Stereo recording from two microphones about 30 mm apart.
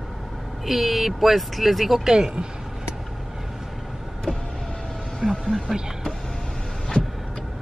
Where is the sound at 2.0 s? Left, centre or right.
Right.